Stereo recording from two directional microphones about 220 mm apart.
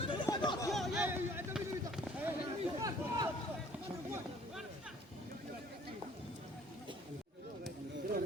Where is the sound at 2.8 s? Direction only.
15° right (ahead or behind).